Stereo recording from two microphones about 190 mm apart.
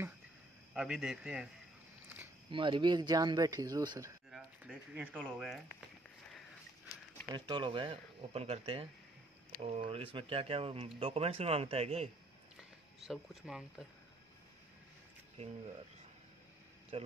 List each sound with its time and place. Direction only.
0.7 s a man's voice: 5° right (ahead or behind)
2.5 s speech: 25° right (ahead or behind)
4.3 s speech: 5° right (ahead or behind)
7.3 s speech: 25° right (ahead or behind)
12.5 s speech: centre (ahead or behind)
15.4 s speech: 35° right (ahead or behind)
16.9 s speech: 30° right (ahead or behind)